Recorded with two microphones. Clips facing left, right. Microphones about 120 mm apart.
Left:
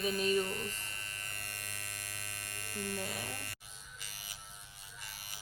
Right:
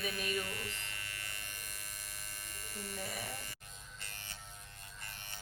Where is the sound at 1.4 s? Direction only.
60° left (ahead or behind).